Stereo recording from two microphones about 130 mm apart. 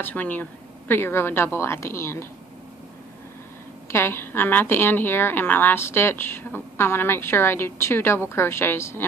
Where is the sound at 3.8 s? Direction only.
20° left (ahead or behind).